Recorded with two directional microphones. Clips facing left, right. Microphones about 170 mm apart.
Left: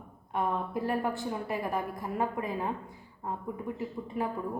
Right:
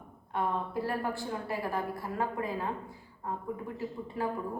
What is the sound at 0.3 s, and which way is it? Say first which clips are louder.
A woman's voice: left 1 dB; 20° left (ahead or behind).